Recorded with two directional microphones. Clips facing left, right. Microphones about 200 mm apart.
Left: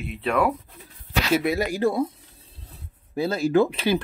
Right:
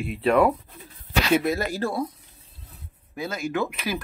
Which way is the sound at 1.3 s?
15° left (ahead or behind).